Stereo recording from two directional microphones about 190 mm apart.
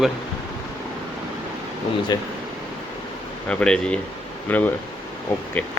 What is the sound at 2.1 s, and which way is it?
Speech, 20° left (ahead or behind).